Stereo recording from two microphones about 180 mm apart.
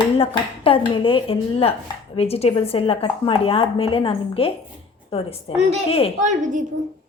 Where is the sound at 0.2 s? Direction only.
30° left (ahead or behind).